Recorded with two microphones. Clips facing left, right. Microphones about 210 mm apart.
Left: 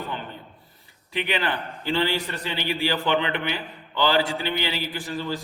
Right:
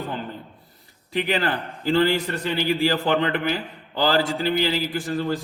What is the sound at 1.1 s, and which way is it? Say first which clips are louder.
A man's voice: right 3 dB; 40° right (ahead or behind).